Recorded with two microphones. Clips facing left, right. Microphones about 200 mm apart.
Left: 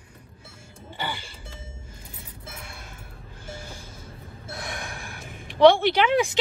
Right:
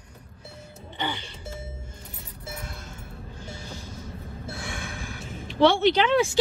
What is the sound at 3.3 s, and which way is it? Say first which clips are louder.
Music: left 3 dB; 50° left (ahead or behind).